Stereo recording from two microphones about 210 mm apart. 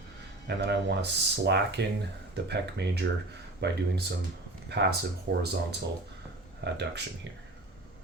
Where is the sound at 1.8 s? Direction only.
55° right (ahead or behind).